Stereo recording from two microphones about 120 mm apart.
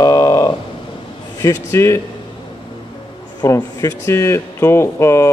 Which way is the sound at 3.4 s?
30° left (ahead or behind).